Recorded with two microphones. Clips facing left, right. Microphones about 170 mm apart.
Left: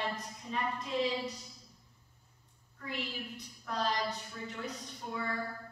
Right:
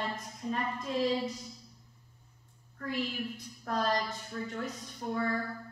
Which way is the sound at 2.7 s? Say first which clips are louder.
Right 6 dB; 50° right (ahead or behind).